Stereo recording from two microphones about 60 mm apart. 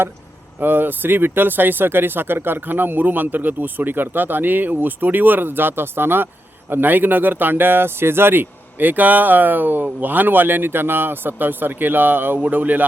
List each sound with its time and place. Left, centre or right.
0.6 s speech: right